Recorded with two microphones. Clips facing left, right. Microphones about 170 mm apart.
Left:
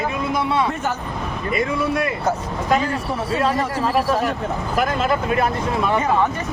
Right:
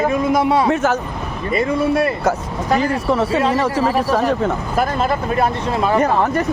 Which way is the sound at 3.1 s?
90° right.